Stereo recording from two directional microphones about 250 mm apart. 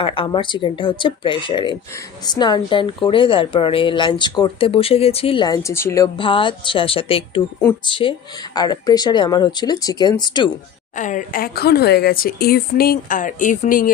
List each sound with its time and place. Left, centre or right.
0.0 s a woman's voice: left
10.9 s speech: left